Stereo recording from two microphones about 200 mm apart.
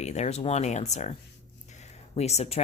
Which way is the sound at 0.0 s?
35° left (ahead or behind).